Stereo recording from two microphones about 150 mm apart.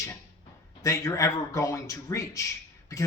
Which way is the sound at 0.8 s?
20° left (ahead or behind).